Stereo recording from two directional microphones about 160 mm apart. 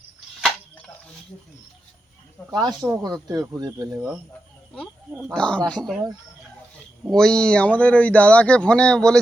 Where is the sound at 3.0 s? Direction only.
25° right (ahead or behind).